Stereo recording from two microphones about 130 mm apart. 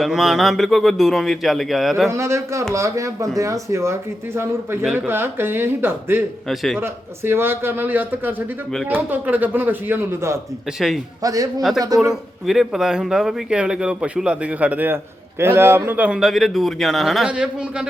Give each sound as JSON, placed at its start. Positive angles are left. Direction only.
{"t": 0.0, "sound": "speech", "side_deg": 0}
{"t": 2.0, "sound": "speech", "side_deg": -20}
{"t": 6.5, "sound": "speech", "side_deg": 0}
{"t": 6.7, "sound": "speech", "side_deg": -20}
{"t": 10.8, "sound": "speech", "side_deg": -5}
{"t": 11.2, "sound": "speech", "side_deg": -25}
{"t": 12.5, "sound": "speech", "side_deg": -5}